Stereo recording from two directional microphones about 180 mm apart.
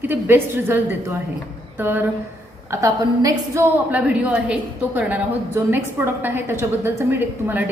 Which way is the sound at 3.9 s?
5° right (ahead or behind).